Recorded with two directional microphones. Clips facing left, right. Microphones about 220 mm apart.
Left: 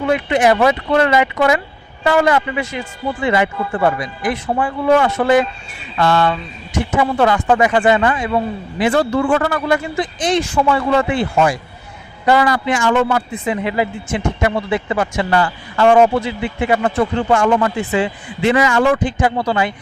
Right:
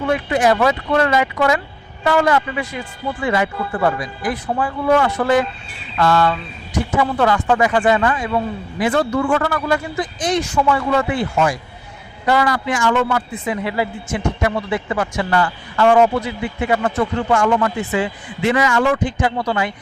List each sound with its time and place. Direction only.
0.1 s speech: 20° left (ahead or behind)